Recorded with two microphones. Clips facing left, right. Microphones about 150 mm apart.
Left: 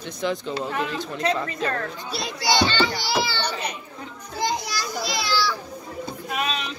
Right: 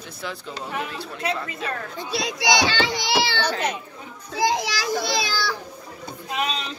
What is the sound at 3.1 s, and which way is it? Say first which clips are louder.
Speech: right 2 dB; 90° right.